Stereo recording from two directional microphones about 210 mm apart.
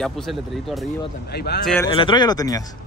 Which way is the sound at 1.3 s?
50° left (ahead or behind).